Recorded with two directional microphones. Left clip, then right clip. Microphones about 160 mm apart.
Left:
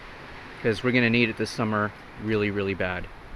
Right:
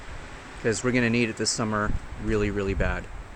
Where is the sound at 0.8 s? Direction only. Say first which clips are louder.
Left 3 dB; 5° left (ahead or behind).